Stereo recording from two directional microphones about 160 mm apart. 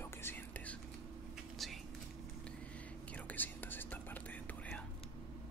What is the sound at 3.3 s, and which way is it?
Whispering, 10° left (ahead or behind).